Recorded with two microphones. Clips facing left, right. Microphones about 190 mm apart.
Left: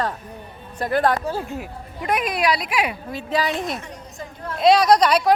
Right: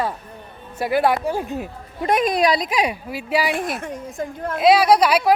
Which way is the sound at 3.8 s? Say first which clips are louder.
Right 7 dB; 50° right (ahead or behind).